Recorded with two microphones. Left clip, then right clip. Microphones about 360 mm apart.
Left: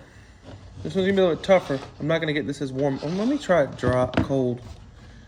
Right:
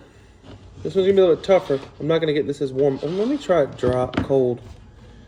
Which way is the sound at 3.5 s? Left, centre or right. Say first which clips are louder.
Right 1 dB; centre.